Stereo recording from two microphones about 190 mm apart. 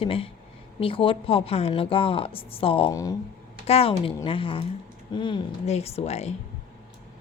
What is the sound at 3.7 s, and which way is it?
A woman's voice, 30° left (ahead or behind).